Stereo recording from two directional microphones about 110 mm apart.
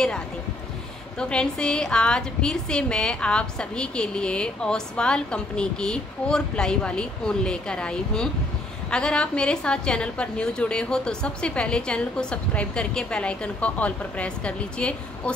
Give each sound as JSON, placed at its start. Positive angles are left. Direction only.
{"t": 1.3, "sound": "a woman's voice", "side_deg": 5}